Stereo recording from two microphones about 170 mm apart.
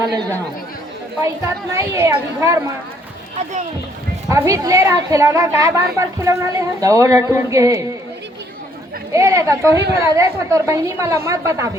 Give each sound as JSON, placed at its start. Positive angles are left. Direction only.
{"t": 1.7, "sound": "a woman's voice", "side_deg": -15}
{"t": 4.3, "sound": "a woman's voice", "side_deg": -20}
{"t": 9.1, "sound": "a woman's voice", "side_deg": -20}